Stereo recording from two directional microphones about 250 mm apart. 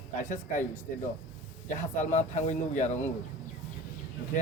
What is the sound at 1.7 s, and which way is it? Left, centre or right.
Speech, left.